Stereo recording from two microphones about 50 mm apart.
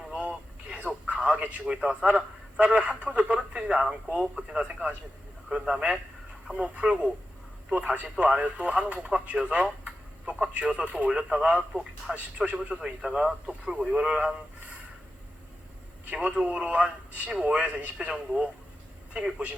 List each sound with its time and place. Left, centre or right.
0.1 s a sound: right
1.6 s speech: centre
16.1 s speech: right